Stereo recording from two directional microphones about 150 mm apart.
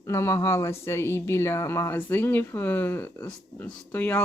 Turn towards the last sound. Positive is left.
turn(degrees=10)  # may be behind; listen again after turning